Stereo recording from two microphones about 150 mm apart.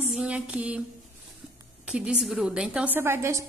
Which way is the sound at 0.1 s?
5° right (ahead or behind).